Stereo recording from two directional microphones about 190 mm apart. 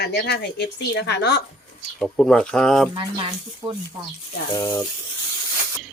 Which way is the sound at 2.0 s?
5° left (ahead or behind).